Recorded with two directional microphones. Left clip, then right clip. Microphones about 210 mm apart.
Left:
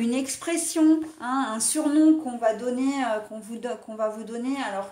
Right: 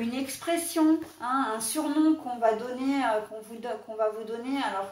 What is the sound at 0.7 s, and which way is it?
A woman's voice, 50° left (ahead or behind).